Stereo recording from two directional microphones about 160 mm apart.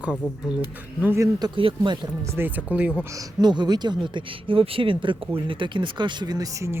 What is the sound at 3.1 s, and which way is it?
Speech, 25° right (ahead or behind).